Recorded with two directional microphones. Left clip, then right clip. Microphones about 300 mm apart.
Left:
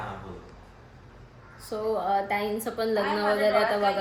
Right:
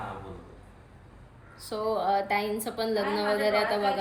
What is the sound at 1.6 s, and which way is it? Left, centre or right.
A woman's voice, centre.